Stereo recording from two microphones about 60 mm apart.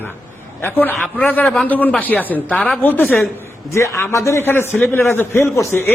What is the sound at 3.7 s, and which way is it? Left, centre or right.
Speech, left.